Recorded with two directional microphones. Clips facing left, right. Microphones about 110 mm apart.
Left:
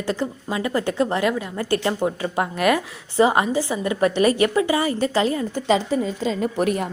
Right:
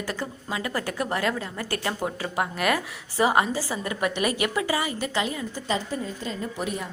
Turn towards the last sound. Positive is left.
turn(degrees=60)  # may be behind; listen again after turning